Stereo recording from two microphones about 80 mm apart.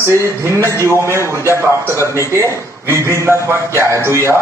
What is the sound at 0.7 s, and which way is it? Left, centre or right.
A man's voice, right.